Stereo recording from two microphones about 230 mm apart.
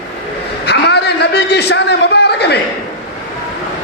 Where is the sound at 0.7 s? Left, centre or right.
Left.